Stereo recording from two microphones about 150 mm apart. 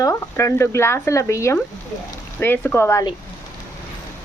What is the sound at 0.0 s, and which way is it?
Speech, 20° left (ahead or behind).